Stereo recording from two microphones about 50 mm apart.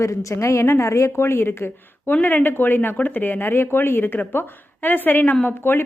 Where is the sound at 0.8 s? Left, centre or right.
Left.